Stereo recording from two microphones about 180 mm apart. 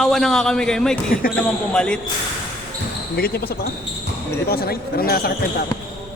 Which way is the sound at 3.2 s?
60° left (ahead or behind).